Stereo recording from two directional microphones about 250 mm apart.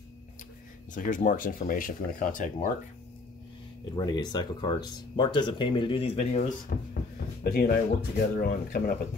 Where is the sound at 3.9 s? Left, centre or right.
Centre.